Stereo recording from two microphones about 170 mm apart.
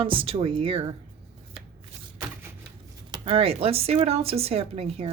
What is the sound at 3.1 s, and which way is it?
Speech, 35° right (ahead or behind).